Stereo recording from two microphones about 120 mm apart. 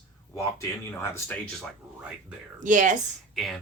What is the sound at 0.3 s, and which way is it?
Speech, 25° left (ahead or behind).